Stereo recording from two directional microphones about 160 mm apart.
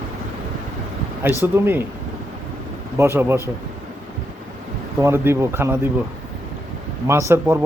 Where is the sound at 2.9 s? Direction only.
15° right (ahead or behind).